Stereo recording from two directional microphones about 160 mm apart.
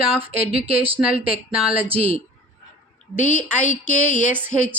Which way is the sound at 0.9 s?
10° right (ahead or behind).